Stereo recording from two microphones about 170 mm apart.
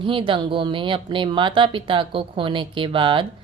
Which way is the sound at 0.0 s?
30° right (ahead or behind).